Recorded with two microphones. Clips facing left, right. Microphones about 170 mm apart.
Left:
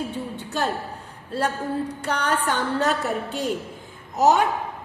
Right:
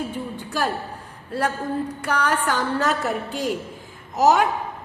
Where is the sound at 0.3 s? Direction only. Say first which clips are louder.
Right 1 dB; 25° left (ahead or behind).